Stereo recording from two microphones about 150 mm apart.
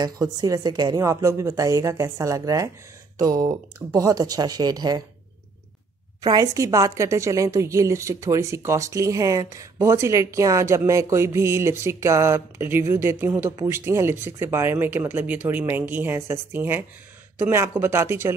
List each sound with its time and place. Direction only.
0.0 s a woman's voice: 25° right (ahead or behind)
6.2 s a woman's voice: 25° right (ahead or behind)